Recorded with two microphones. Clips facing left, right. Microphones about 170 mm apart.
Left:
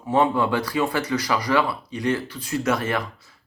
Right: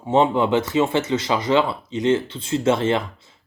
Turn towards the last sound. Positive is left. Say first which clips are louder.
# right 4 dB
turn(degrees=-25)  # may be behind; listen again after turning